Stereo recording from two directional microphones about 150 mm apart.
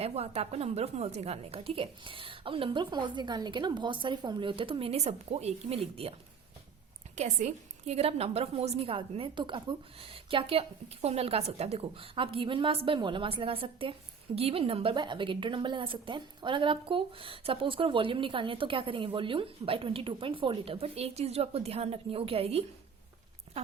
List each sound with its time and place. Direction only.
0.0 s a woman's voice: 45° right (ahead or behind)
7.2 s a woman's voice: 55° right (ahead or behind)